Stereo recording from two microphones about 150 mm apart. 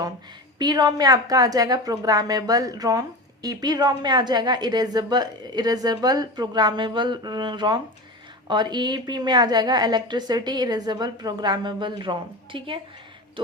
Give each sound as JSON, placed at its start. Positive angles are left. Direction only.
{"t": 0.6, "sound": "a woman's voice", "side_deg": -25}